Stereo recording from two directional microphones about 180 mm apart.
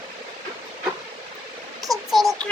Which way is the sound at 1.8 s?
Centre (ahead or behind).